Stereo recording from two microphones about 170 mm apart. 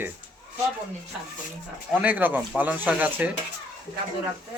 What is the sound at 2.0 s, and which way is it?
Speech, 10° right (ahead or behind).